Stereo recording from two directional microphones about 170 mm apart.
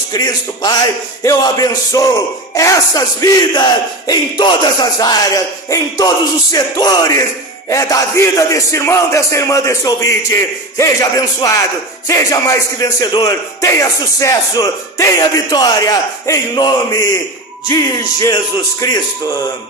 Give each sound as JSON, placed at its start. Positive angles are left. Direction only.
{"t": 0.1, "sound": "a man's voice", "side_deg": 20}